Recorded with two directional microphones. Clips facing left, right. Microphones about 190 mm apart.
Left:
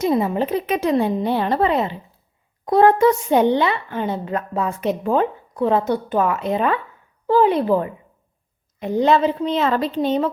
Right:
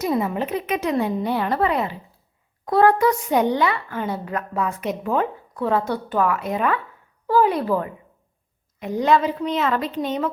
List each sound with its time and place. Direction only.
0.0 s a child's voice: 25° left (ahead or behind)